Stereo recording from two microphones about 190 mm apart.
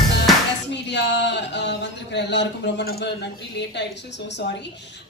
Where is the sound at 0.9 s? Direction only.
65° left (ahead or behind).